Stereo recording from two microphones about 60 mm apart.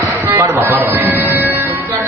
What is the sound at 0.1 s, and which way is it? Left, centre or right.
Music, right.